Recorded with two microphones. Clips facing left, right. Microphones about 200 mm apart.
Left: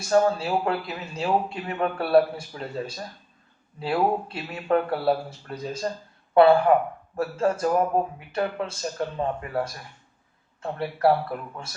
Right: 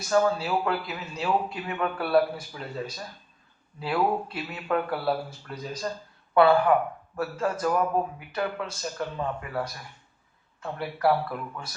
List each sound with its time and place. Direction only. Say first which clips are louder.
0.1 s a man's voice: left 2 dB; 30° left (ahead or behind)